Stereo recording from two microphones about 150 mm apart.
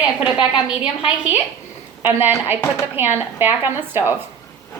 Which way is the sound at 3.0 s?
15° right (ahead or behind).